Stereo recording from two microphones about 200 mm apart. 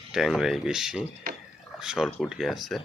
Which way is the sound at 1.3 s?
45° right (ahead or behind).